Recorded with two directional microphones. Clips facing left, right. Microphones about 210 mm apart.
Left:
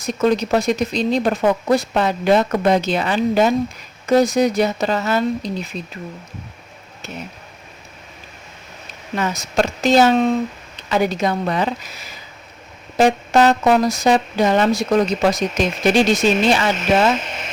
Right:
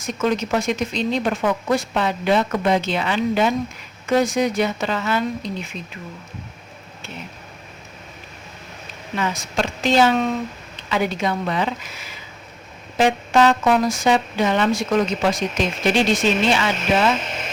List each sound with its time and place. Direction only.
0.0 s speech: 35° left (ahead or behind)
9.1 s speech: 45° left (ahead or behind)